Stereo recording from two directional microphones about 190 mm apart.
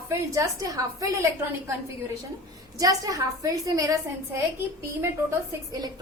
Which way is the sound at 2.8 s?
20° right (ahead or behind).